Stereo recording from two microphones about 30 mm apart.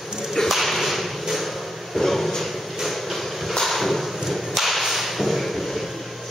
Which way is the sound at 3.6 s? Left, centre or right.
Centre.